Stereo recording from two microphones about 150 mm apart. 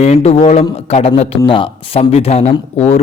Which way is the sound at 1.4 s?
35° left (ahead or behind).